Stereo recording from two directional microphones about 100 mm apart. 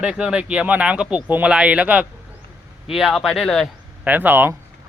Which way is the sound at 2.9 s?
Centre (ahead or behind).